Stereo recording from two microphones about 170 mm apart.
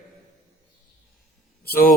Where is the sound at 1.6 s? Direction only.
60° left (ahead or behind).